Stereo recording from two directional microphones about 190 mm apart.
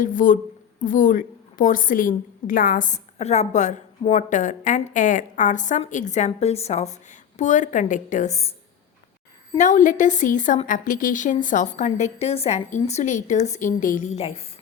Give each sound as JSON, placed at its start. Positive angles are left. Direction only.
{"t": 0.0, "sound": "a woman's voice", "side_deg": 45}
{"t": 9.6, "sound": "a woman's voice", "side_deg": 40}